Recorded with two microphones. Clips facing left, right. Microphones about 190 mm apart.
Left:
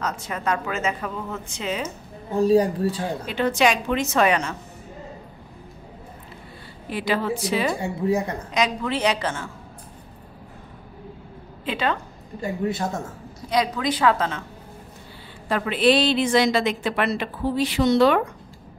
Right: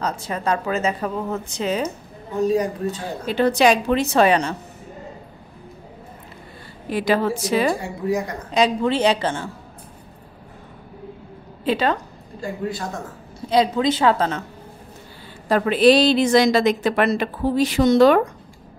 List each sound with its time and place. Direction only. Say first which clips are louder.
0.0 s a woman's voice: right 3 dB; 30° right (ahead or behind)
2.3 s speech: left 2 dB; 30° left (ahead or behind)
3.3 s a woman's voice: right 5 dB; 35° right (ahead or behind)
6.9 s a woman's voice: right 4 dB; 40° right (ahead or behind)
8.5 s a woman's voice: right 9 dB; 30° right (ahead or behind)
11.6 s a woman's voice: right 5 dB; 35° right (ahead or behind)
12.4 s speech: left 1 dB; 20° left (ahead or behind)
13.5 s a woman's voice: right 5 dB; 25° right (ahead or behind)
15.4 s a woman's voice: right 5 dB; 40° right (ahead or behind)